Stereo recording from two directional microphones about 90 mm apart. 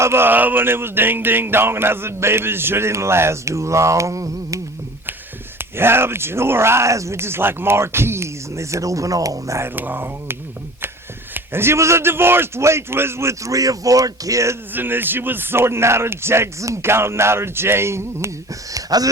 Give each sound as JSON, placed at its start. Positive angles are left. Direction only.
{"t": 0.0, "sound": "speech", "side_deg": -25}
{"t": 5.5, "sound": "speech", "side_deg": -25}
{"t": 11.3, "sound": "a man's voice", "side_deg": -25}
{"t": 14.7, "sound": "speech", "side_deg": -25}